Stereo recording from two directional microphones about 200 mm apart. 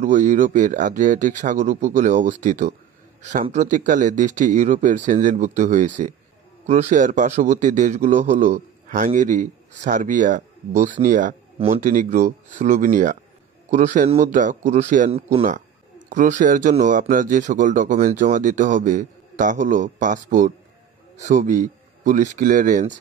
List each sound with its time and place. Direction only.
0.0 s speech: 40° right (ahead or behind)